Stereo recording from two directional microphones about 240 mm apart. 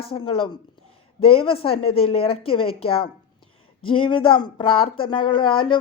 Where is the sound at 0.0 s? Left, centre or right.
Left.